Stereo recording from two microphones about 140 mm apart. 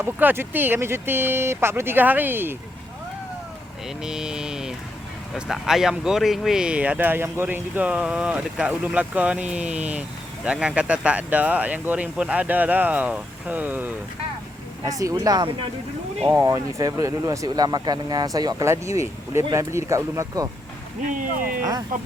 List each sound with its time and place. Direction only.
0.0 s speech: 15° right (ahead or behind)
3.8 s a sound: 5° right (ahead or behind)
5.3 s speech: 5° right (ahead or behind)
14.8 s speech: 25° right (ahead or behind)
21.2 s speech: 80° right
21.6 s speech: 25° right (ahead or behind)